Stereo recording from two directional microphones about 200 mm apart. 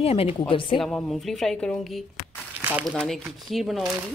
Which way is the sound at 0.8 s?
Centre (ahead or behind).